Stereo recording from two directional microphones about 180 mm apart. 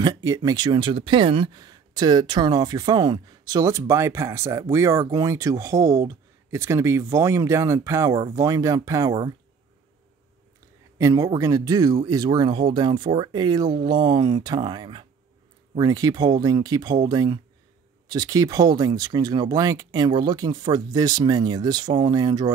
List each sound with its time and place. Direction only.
0.0 s speech: 20° right (ahead or behind)
11.0 s speech: 20° right (ahead or behind)